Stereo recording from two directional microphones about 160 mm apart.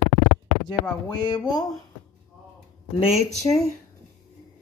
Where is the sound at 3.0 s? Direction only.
40° left (ahead or behind).